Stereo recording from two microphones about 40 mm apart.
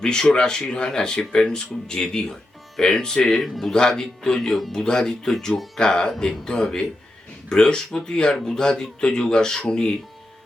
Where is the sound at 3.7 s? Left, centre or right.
Centre.